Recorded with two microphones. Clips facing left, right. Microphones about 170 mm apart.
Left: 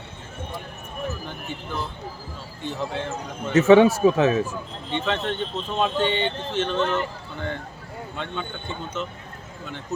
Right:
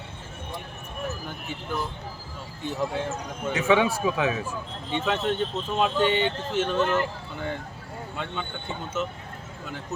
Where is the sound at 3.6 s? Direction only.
40° left (ahead or behind).